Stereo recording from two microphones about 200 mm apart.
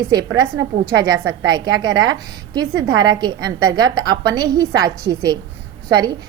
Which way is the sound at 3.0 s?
20° right (ahead or behind).